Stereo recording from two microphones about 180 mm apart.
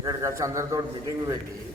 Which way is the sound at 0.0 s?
15° right (ahead or behind).